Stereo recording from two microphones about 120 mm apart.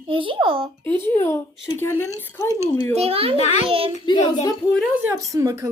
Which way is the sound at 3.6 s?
50° right (ahead or behind).